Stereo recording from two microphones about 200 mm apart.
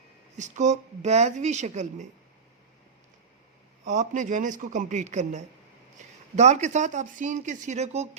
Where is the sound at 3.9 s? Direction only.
40° right (ahead or behind).